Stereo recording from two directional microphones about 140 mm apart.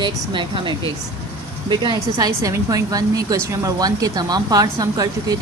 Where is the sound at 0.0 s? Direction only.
35° right (ahead or behind).